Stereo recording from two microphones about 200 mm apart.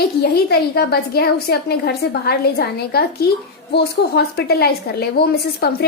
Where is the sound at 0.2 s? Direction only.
50° left (ahead or behind).